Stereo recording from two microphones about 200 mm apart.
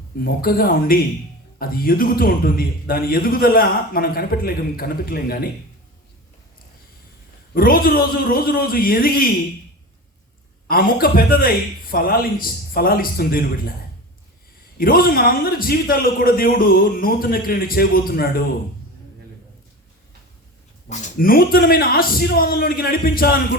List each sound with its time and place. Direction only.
0.2 s a man's voice: 50° left (ahead or behind)
7.5 s a man's voice: 45° left (ahead or behind)
10.7 s a man's voice: 45° left (ahead or behind)
14.8 s a man's voice: 45° left (ahead or behind)
20.8 s a man's voice: 40° left (ahead or behind)